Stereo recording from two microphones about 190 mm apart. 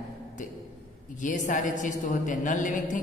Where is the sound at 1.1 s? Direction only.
40° left (ahead or behind).